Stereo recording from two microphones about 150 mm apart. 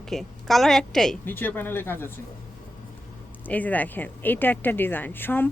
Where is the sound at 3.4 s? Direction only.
10° left (ahead or behind).